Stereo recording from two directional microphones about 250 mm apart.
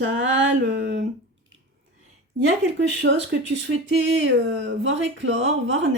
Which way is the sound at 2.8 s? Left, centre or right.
Right.